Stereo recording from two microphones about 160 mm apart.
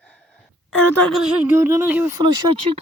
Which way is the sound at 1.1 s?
10° right (ahead or behind).